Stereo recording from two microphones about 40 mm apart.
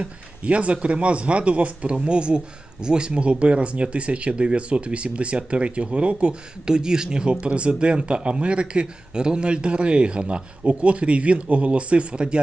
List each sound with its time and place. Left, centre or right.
0.0 s a man's voice: right
6.7 s a man's voice: centre